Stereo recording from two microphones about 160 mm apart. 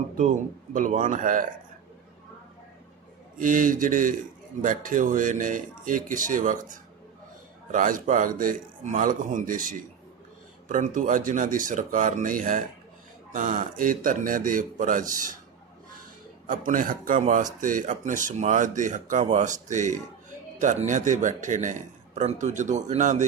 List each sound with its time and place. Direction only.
0.2 s speech: 55° right (ahead or behind)
3.3 s speech: 55° right (ahead or behind)
16.5 s speech: 55° right (ahead or behind)